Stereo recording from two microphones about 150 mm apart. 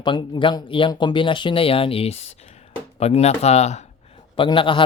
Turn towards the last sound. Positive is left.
turn(degrees=35)  # may be behind; listen again after turning